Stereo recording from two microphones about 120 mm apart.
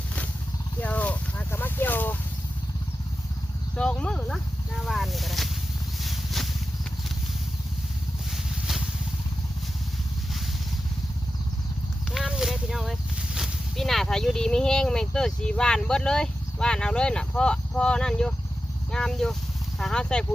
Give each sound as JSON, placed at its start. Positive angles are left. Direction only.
{"t": 0.8, "sound": "a sound", "side_deg": 10}
{"t": 3.8, "sound": "a sound", "side_deg": 10}
{"t": 4.9, "sound": "speech", "side_deg": 0}
{"t": 6.0, "sound": "vehicle", "side_deg": 0}
{"t": 8.3, "sound": "vehicle", "side_deg": 0}
{"t": 12.1, "sound": "speech", "side_deg": -5}